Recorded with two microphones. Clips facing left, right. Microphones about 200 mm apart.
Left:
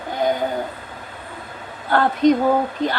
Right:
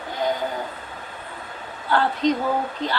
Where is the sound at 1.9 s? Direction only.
50° left (ahead or behind).